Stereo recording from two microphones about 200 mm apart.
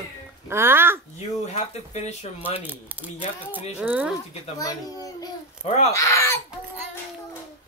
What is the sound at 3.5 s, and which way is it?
Speech, 10° right (ahead or behind).